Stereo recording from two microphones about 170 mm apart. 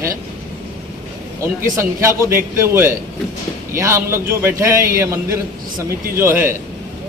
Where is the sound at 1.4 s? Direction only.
15° right (ahead or behind).